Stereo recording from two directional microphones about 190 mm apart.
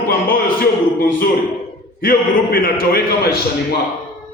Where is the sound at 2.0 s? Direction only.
50° left (ahead or behind).